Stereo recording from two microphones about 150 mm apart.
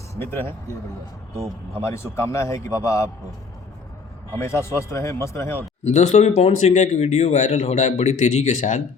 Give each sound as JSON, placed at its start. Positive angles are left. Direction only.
{"t": 0.2, "sound": "speech", "side_deg": 15}
{"t": 1.8, "sound": "a man's voice", "side_deg": 20}
{"t": 4.4, "sound": "a man's voice", "side_deg": 20}
{"t": 5.8, "sound": "speech", "side_deg": 50}